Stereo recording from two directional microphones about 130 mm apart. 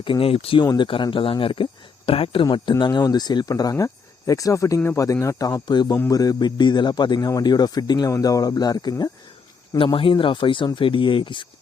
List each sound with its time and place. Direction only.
0.0 s speech: 40° left (ahead or behind)
0.6 s speech: 30° left (ahead or behind)
0.9 s a man's voice: 40° left (ahead or behind)
9.7 s a man's voice: 40° left (ahead or behind)